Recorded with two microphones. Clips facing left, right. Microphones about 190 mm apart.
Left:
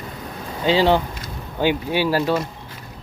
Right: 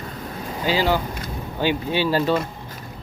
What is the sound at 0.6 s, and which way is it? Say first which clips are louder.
Speech: left 4 dB; 25° left (ahead or behind).